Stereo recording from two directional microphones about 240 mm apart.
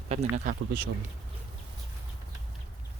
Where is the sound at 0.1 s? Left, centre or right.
Right.